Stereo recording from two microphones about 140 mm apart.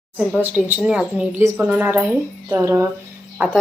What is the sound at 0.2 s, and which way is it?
A woman's voice, 5° right (ahead or behind).